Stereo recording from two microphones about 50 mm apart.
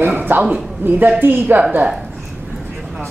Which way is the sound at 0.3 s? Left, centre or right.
Right.